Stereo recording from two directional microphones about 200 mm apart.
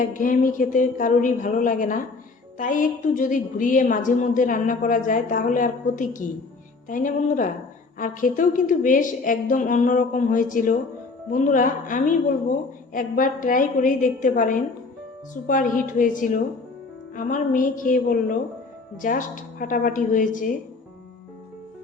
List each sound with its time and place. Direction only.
0.0 s a woman's voice: 40° left (ahead or behind)